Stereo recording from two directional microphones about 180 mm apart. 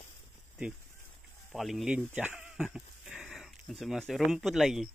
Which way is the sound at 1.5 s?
Centre (ahead or behind).